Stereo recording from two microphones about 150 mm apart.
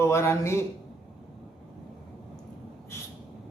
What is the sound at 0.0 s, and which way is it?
Speech, 20° left (ahead or behind).